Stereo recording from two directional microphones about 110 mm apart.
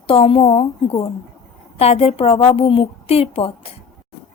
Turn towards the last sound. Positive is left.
turn(degrees=65)  # may be behind; listen again after turning